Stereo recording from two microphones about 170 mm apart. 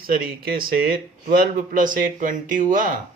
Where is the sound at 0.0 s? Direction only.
60° right (ahead or behind).